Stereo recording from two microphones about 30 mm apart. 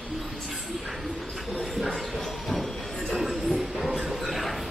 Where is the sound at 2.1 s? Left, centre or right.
Centre.